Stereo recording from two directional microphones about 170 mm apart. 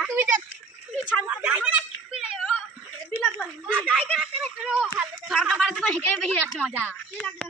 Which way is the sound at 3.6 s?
5° right (ahead or behind).